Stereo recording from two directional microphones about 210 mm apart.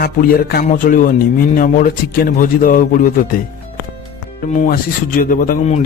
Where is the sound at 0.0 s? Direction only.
45° left (ahead or behind).